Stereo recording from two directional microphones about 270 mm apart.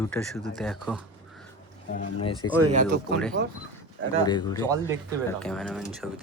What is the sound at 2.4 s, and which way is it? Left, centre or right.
Speech, left.